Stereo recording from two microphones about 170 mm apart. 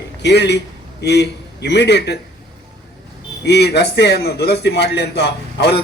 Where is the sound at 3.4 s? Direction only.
80° left.